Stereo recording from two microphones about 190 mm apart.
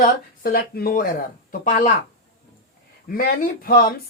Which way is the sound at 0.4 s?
50° left (ahead or behind).